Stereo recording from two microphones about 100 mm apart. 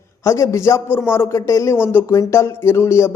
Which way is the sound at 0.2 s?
30° left (ahead or behind).